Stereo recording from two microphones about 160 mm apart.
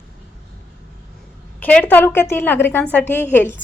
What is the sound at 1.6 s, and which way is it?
A woman's voice, 10° left (ahead or behind).